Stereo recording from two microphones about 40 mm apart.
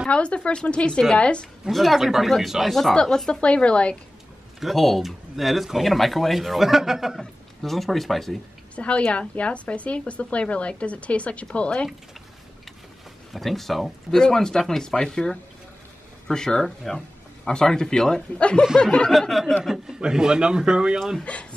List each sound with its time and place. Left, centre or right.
0.1 s speech: left
1.7 s speech: centre
2.9 s speech: centre
3.3 s speech: left
4.6 s speech: centre
7.2 s speech: centre
8.7 s speech: left
13.3 s speech: centre
14.1 s speech: centre
19.0 s speech: centre
20.0 s speech: centre
21.2 s speech: left